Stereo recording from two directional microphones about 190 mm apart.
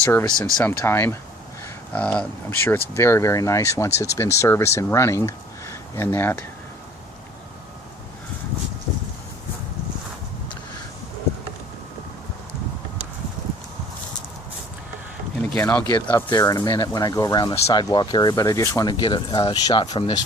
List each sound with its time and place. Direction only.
0.0 s speech: 10° left (ahead or behind)
15.4 s a sound: 5° left (ahead or behind)
16.0 s speech: 15° left (ahead or behind)